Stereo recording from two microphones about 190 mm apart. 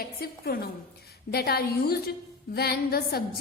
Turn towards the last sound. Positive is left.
turn(degrees=55)  # may be behind; listen again after turning